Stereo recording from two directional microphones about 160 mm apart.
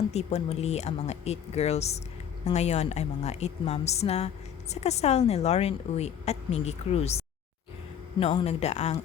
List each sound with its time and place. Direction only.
0.1 s a woman's voice: 45° left (ahead or behind)